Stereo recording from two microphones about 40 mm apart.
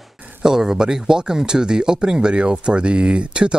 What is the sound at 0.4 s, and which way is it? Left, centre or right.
Speech, centre.